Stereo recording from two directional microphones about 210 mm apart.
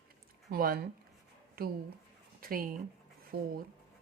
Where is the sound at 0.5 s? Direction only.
45° right (ahead or behind).